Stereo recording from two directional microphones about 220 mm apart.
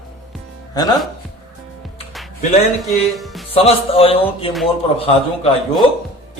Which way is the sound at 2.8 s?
Centre (ahead or behind).